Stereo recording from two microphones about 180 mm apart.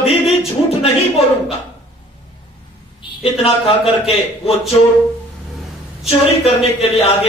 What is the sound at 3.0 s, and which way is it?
A woman's voice, 30° left (ahead or behind).